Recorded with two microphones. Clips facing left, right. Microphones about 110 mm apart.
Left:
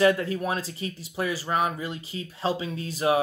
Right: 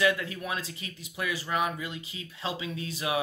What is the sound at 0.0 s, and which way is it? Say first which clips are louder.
Speech: left 6 dB; 40° left (ahead or behind).